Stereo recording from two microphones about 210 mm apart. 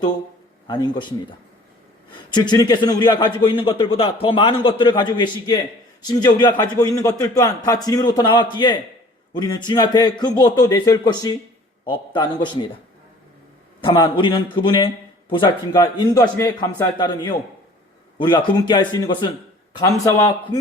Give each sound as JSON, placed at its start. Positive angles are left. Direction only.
{"t": 0.7, "sound": "a man's voice", "side_deg": 20}
{"t": 2.3, "sound": "a man's voice", "side_deg": 20}
{"t": 13.8, "sound": "a man's voice", "side_deg": 20}